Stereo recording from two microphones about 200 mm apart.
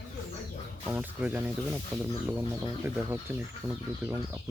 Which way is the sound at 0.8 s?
10° right (ahead or behind).